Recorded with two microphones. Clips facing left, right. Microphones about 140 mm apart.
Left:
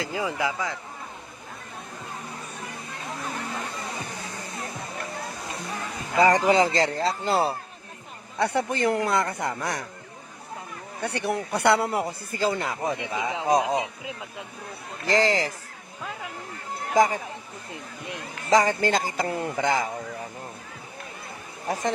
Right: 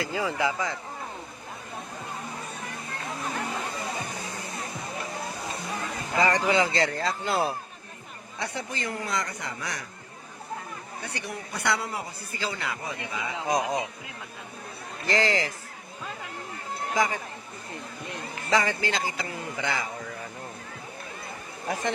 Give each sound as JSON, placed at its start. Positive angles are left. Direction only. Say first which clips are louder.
{"t": 0.0, "sound": "speech", "louder": "even", "side_deg": 15}
{"t": 6.1, "sound": "speech", "louder": "left 4 dB", "side_deg": 40}
{"t": 8.4, "sound": "a man's voice", "louder": "left 9 dB", "side_deg": 60}
{"t": 11.0, "sound": "a man's voice", "louder": "left 11 dB", "side_deg": 65}
{"t": 13.0, "sound": "speech", "louder": "left 5 dB", "side_deg": 30}
{"t": 15.0, "sound": "speech", "louder": "left 3 dB", "side_deg": 40}
{"t": 16.9, "sound": "speech", "louder": "left 6 dB", "side_deg": 45}
{"t": 18.5, "sound": "speech", "louder": "left 5 dB", "side_deg": 45}
{"t": 21.7, "sound": "speech", "louder": "left 2 dB", "side_deg": 40}